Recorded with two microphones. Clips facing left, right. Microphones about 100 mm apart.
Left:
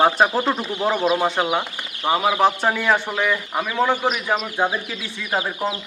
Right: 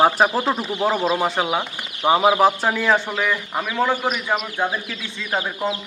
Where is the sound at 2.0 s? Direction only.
15° right (ahead or behind).